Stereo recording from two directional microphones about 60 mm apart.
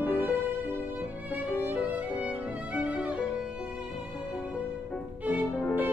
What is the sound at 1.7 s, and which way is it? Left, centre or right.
Violin, right.